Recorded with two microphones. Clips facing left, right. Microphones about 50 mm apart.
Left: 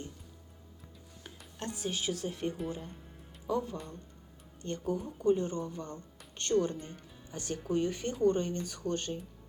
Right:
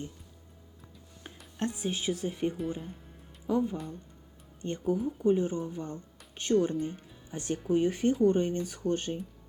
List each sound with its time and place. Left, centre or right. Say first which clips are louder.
1.2 s speech: right 7 dB; right